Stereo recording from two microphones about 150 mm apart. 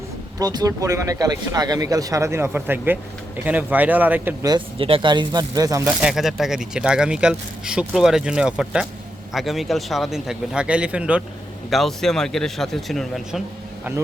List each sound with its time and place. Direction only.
0.3 s a man's voice: 25° right (ahead or behind)
4.4 s speech: 35° right (ahead or behind)
5.8 s speech: 5° right (ahead or behind)